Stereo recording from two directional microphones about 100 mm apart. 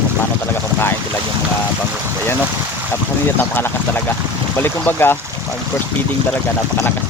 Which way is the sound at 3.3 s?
20° left (ahead or behind).